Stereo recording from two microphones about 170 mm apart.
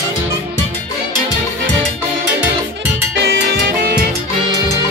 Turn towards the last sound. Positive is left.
turn(degrees=-70)  # may be behind; listen again after turning